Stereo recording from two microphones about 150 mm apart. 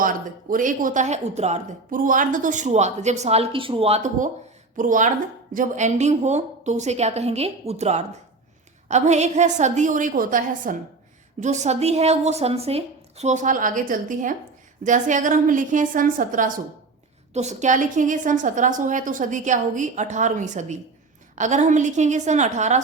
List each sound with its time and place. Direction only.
0.5 s a woman's voice: 65° right (ahead or behind)
11.3 s a woman's voice: 50° right (ahead or behind)
17.3 s a woman's voice: 50° right (ahead or behind)